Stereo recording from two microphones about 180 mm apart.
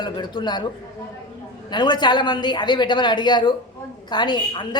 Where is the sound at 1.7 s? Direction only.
25° left (ahead or behind).